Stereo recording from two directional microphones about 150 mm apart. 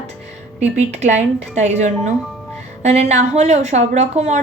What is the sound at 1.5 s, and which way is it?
A woman's voice, 50° right (ahead or behind).